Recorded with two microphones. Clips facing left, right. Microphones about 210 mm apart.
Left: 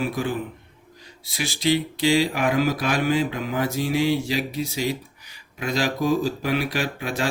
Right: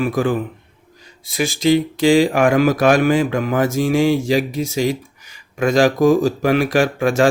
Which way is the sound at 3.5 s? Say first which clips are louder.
Right 7 dB; 45° right (ahead or behind).